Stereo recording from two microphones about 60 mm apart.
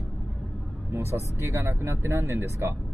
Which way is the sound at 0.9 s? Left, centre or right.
Right.